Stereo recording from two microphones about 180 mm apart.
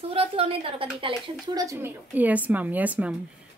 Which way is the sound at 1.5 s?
15° right (ahead or behind).